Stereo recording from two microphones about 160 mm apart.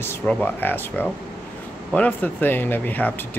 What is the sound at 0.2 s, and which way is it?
Speech, 5° left (ahead or behind).